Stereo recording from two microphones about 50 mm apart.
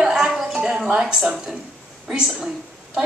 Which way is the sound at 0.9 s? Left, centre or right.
Centre.